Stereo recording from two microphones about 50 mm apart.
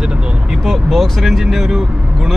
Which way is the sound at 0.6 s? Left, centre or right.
Centre.